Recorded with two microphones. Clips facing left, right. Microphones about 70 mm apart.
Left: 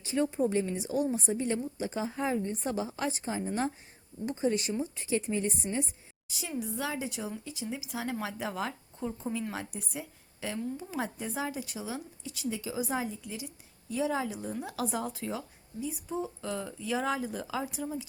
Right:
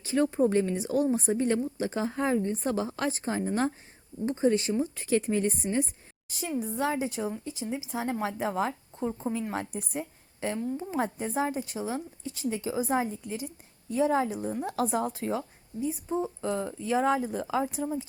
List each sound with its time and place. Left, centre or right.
0.1 s a woman's voice: right
4.9 s a woman's voice: right